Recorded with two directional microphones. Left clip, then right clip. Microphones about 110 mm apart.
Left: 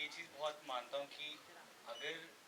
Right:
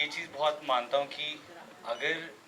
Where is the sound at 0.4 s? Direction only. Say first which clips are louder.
Right 15 dB; 20° right (ahead or behind).